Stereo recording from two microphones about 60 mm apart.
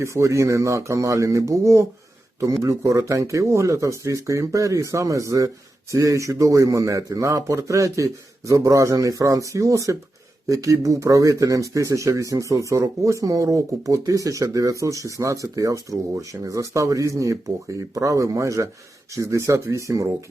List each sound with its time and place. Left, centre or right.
0.0 s speech: right